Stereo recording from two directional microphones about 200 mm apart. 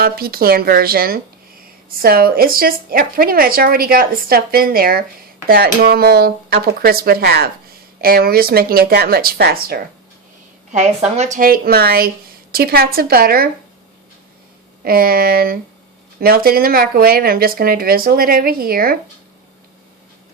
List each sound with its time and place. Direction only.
0.0 s speech: 50° right (ahead or behind)
10.7 s speech: 35° right (ahead or behind)
14.8 s speech: 50° right (ahead or behind)